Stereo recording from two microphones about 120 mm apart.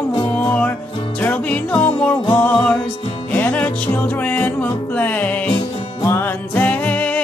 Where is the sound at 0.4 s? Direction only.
15° left (ahead or behind).